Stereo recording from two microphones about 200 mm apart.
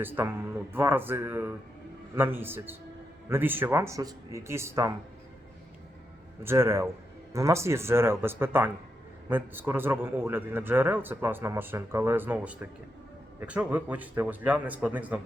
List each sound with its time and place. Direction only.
0.0 s a man's voice: 10° right (ahead or behind)
6.4 s a man's voice: 10° right (ahead or behind)